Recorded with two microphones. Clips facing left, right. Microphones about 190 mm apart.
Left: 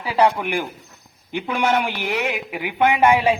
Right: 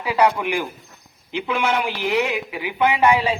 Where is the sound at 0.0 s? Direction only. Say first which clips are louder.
Even; 30° left (ahead or behind).